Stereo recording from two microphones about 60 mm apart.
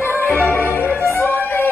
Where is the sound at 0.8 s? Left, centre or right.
Left.